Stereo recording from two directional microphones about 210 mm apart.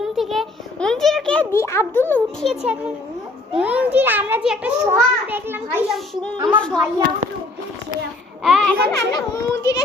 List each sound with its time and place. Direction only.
0.0 s a child's voice: centre (ahead or behind)
3.5 s a child's voice: 5° right (ahead or behind)
6.3 s a woman's voice: 20° right (ahead or behind)
6.6 s a child's voice: 5° left (ahead or behind)
8.4 s a child's voice: 5° left (ahead or behind)
8.9 s a child's voice: 15° left (ahead or behind)